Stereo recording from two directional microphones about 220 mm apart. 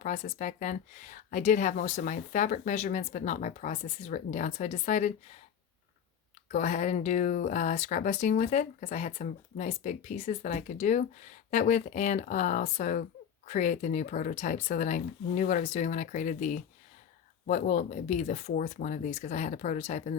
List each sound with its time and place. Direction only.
0.0 s speech: 30° left (ahead or behind)
6.5 s speech: 30° left (ahead or behind)